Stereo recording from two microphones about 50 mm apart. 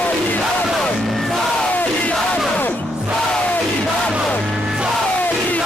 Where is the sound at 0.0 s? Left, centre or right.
Left.